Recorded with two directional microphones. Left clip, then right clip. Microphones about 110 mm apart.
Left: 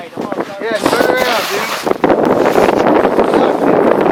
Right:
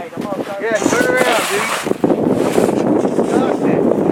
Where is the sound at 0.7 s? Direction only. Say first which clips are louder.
Left 2 dB; 5° left (ahead or behind).